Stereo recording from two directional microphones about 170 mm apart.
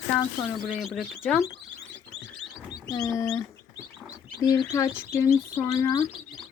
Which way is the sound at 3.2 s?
5° left (ahead or behind).